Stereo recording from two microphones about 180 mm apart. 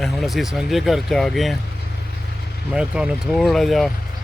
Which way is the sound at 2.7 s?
5° right (ahead or behind).